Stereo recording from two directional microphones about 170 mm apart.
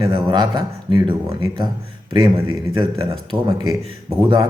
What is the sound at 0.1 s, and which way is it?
Speech, 25° right (ahead or behind).